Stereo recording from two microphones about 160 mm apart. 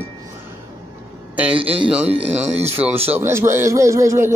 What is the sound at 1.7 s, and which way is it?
Speech, 35° right (ahead or behind).